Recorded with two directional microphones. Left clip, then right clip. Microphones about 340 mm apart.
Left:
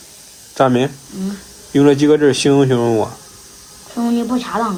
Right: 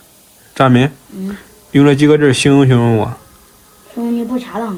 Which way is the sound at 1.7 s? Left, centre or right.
Centre.